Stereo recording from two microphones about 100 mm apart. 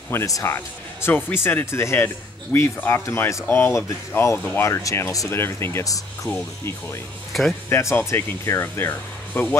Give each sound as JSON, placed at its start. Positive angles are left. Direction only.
{"t": 0.1, "sound": "speech", "side_deg": 25}
{"t": 7.3, "sound": "speech", "side_deg": 0}
{"t": 7.7, "sound": "speech", "side_deg": 25}